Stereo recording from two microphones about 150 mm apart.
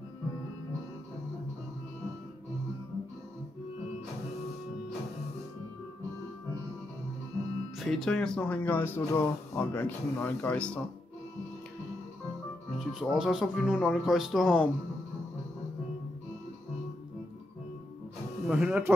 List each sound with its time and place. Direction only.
7.8 s speech: centre (ahead or behind)
12.7 s speech: centre (ahead or behind)
18.5 s speech: 5° right (ahead or behind)